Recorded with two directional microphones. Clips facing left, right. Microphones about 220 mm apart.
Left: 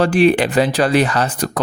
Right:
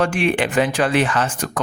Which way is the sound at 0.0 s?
35° left (ahead or behind).